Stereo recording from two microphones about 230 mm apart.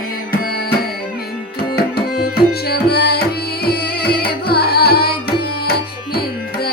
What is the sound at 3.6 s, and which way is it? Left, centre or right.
Music, left.